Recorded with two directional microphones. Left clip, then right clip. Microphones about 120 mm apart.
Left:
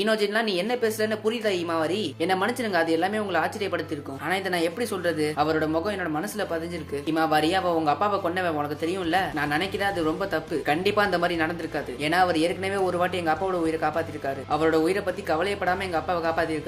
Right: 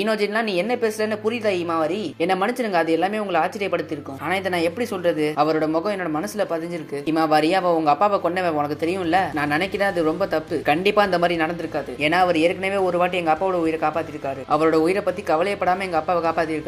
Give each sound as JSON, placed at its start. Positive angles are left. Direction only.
{"t": 0.0, "sound": "a woman's voice", "side_deg": -30}
{"t": 5.4, "sound": "speech", "side_deg": -40}
{"t": 7.1, "sound": "speech", "side_deg": -45}
{"t": 14.5, "sound": "speech", "side_deg": -40}